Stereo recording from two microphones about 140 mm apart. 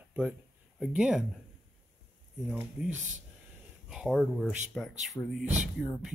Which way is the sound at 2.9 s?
60° right (ahead or behind).